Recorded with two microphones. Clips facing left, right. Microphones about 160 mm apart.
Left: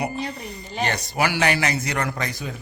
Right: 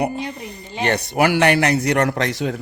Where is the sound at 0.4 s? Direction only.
60° right (ahead or behind).